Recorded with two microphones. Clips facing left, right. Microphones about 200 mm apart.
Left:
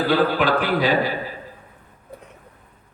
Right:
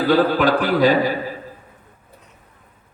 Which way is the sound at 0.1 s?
45° right (ahead or behind).